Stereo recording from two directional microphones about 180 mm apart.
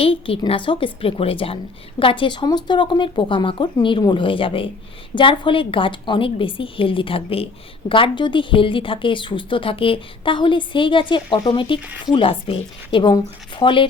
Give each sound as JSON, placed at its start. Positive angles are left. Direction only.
{"t": 0.0, "sound": "a woman's voice", "side_deg": 30}